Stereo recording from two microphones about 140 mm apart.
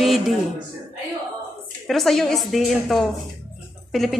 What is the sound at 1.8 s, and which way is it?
A woman's voice, centre (ahead or behind).